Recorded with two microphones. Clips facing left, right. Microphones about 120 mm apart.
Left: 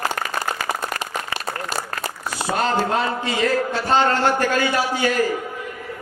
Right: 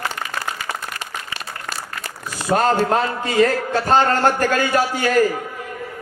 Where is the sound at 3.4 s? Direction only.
45° right (ahead or behind).